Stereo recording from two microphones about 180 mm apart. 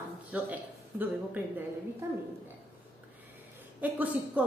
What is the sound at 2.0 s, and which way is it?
Speech, 15° right (ahead or behind).